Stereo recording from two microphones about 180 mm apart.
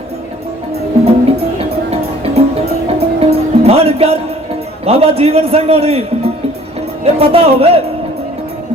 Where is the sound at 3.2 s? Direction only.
35° right (ahead or behind).